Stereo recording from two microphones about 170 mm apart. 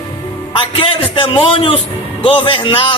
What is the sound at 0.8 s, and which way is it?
A man's voice, 30° left (ahead or behind).